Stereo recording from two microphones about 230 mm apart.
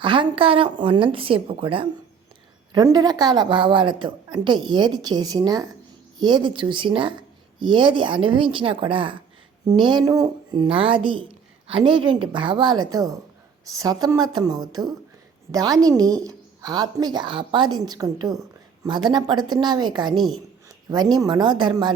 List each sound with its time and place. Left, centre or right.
0.0 s a woman's voice: right